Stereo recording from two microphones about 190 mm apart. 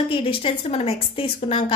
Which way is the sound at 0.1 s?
30° left (ahead or behind).